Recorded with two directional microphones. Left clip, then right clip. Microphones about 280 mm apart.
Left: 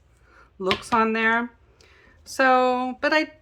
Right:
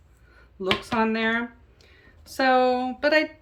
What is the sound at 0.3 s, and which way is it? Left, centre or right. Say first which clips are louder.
Speech: left 1 dB; centre.